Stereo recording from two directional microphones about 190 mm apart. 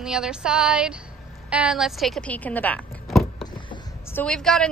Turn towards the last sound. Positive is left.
turn(degrees=0)  # may be behind; listen again after turning